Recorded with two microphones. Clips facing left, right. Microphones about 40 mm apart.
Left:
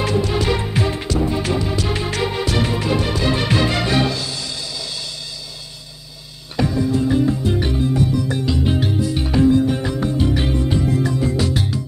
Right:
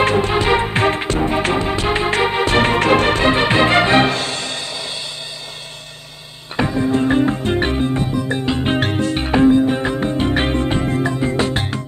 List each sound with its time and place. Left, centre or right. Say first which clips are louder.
0.0 s music: right 4 dB; right
6.5 s music: right 2 dB; right